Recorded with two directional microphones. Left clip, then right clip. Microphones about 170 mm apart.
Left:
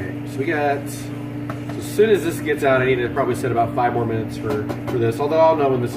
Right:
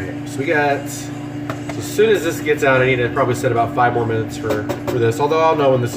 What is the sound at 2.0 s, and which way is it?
A man's voice, 10° left (ahead or behind).